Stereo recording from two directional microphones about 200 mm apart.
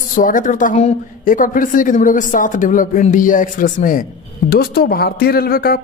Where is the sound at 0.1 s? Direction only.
40° left (ahead or behind).